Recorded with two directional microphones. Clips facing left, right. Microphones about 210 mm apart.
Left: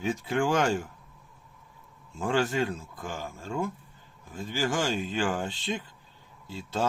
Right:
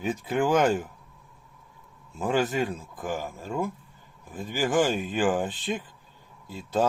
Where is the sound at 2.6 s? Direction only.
15° right (ahead or behind).